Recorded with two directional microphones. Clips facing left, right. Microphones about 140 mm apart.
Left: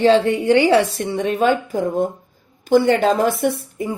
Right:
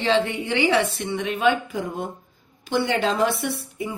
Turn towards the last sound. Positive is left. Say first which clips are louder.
# left 7 dB
turn(degrees=45)  # may be behind; listen again after turning